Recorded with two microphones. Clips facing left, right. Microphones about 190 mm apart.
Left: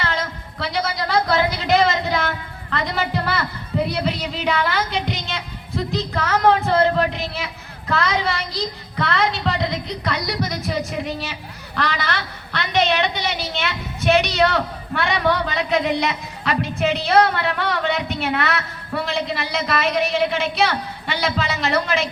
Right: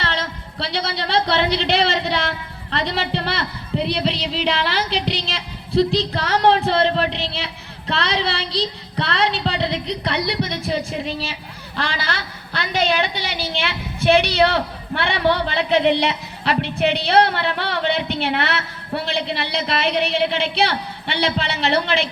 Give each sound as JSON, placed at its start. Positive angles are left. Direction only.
{"t": 0.0, "sound": "a woman's voice", "side_deg": -30}
{"t": 4.2, "sound": "music", "side_deg": -30}
{"t": 11.8, "sound": "a sound", "side_deg": -30}
{"t": 16.9, "sound": "a woman's voice", "side_deg": -30}
{"t": 20.0, "sound": "a woman's voice", "side_deg": -65}
{"t": 20.6, "sound": "a man's voice", "side_deg": -30}